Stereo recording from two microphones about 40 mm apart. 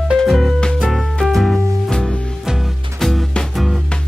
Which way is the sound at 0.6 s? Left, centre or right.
Left.